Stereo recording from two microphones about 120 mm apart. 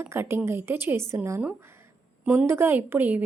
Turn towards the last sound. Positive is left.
turn(degrees=-15)  # may be behind; listen again after turning